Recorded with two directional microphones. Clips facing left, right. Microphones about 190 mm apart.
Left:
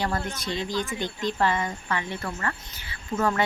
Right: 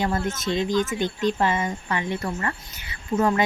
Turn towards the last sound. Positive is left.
turn(degrees=-20)  # may be behind; listen again after turning